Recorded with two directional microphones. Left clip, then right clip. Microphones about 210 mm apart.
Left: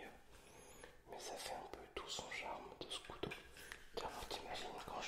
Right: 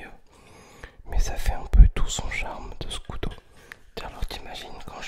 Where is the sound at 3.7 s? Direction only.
40° right (ahead or behind).